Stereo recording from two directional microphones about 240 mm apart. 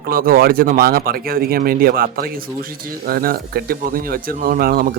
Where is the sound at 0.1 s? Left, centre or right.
Right.